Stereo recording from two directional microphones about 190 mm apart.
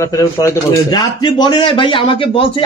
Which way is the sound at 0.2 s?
15° left (ahead or behind).